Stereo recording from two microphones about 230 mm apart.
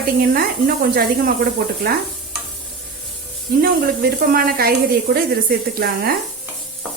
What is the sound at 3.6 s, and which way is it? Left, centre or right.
Speech, right.